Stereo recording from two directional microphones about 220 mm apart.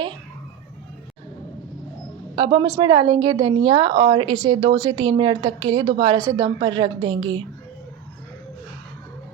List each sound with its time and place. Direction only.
2.3 s a woman's voice: 20° right (ahead or behind)